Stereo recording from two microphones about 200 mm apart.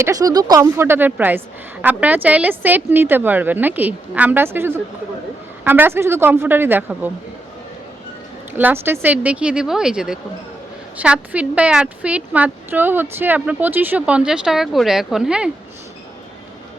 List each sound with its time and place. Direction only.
0.0 s speech: 15° right (ahead or behind)
8.5 s speech: 10° right (ahead or behind)